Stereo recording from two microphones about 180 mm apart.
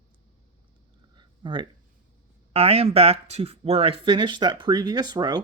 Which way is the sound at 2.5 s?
30° right (ahead or behind).